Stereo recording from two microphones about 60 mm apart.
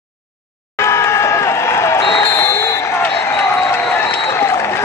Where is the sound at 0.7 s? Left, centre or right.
Left.